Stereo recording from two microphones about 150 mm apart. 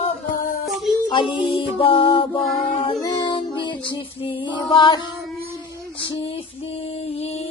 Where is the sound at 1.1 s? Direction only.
35° left (ahead or behind).